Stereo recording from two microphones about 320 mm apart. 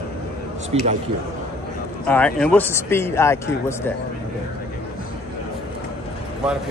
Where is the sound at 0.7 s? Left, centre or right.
Centre.